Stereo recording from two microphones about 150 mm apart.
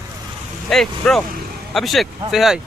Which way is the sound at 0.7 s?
5° left (ahead or behind).